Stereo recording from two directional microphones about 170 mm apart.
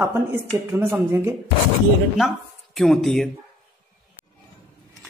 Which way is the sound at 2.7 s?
Centre (ahead or behind).